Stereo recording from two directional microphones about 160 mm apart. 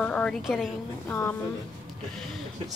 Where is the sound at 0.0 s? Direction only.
5° left (ahead or behind).